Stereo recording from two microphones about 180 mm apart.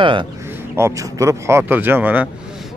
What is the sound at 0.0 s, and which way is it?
Speech, 25° right (ahead or behind).